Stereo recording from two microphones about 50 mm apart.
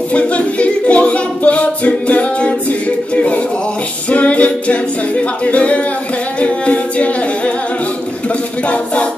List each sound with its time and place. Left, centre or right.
0.1 s a capella: left
4.1 s music: left
5.4 s a capella: left